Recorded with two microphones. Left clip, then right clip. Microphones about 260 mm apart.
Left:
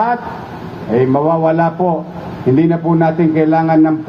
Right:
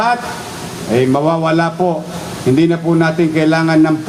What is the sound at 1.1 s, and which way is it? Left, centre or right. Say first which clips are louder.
A man's voice: left 1 dB; right.